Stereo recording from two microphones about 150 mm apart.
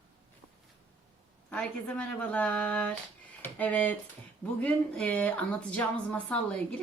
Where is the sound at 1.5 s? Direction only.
10° left (ahead or behind).